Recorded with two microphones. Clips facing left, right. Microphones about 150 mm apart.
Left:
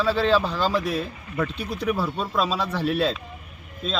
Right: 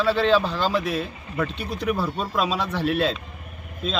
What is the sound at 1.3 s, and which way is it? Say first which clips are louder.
Speech: even; 30° right (ahead or behind).